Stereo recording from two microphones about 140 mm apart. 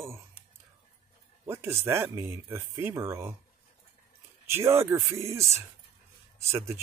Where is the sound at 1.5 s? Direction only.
20° right (ahead or behind).